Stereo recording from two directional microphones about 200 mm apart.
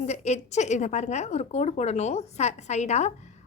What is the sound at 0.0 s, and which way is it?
A woman's voice, 35° left (ahead or behind).